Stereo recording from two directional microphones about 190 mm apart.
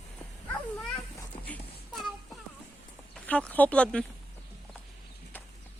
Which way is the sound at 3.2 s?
5° left (ahead or behind).